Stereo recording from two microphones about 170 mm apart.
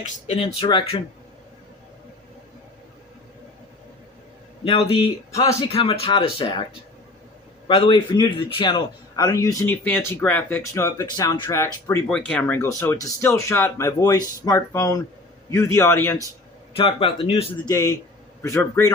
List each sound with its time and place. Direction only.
0.0 s speech: 40° left (ahead or behind)
0.4 s speech: 30° left (ahead or behind)
4.6 s speech: 35° left (ahead or behind)
5.3 s a man's voice: 20° left (ahead or behind)
5.6 s speech: 35° left (ahead or behind)
7.7 s a man's voice: 30° left (ahead or behind)
12.0 s speech: 5° left (ahead or behind)
16.7 s speech: 35° left (ahead or behind)
17.7 s speech: 20° left (ahead or behind)